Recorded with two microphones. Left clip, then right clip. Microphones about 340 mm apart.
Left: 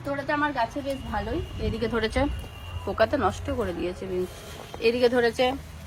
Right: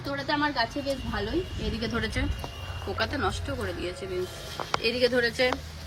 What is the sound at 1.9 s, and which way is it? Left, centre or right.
A woman's voice, centre.